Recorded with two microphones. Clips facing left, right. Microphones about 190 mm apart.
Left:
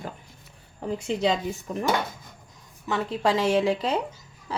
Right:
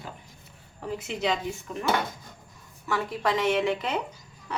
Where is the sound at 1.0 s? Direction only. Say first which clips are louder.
Left 4 dB; 35° left (ahead or behind).